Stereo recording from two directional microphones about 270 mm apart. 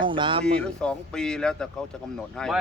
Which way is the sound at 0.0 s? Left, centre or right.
Centre.